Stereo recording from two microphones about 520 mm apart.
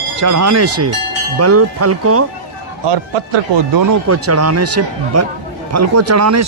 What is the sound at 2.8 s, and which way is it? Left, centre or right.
Speech, right.